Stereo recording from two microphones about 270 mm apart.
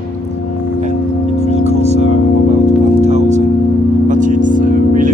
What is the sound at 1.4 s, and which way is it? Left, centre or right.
Music, right.